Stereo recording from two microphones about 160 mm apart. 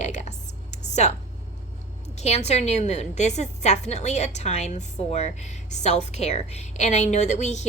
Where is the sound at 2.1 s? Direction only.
45° left (ahead or behind).